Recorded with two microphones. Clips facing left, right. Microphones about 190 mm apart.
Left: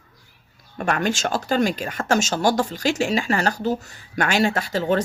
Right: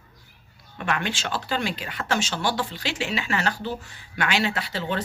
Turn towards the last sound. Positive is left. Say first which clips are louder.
# left 7 dB
turn(degrees=45)  # may be behind; listen again after turning